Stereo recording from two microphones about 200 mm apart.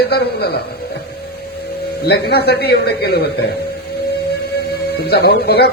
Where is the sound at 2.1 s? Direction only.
55° left (ahead or behind).